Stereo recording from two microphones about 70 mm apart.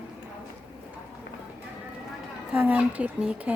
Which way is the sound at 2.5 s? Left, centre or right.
Right.